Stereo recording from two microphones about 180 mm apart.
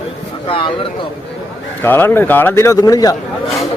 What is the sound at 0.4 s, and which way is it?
Speech, 30° left (ahead or behind).